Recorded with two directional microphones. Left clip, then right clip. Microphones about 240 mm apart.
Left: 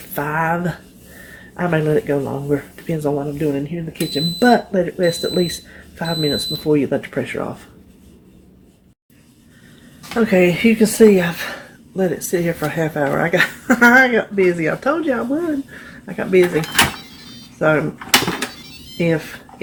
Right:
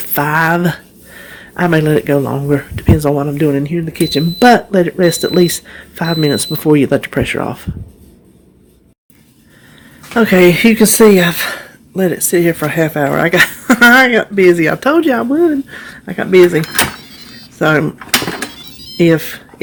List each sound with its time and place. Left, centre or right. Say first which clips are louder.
0.1 s speech: right 7 dB; right
10.2 s speech: right 6 dB; right
17.6 s speech: right 4 dB; right
18.9 s speech: right 8 dB; right